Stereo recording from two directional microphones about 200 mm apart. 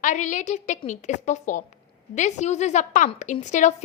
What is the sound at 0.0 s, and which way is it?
A woman's voice, 40° left (ahead or behind).